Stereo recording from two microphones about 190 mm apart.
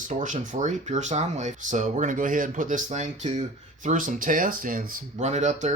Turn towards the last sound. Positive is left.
turn(degrees=-40)  # may be behind; listen again after turning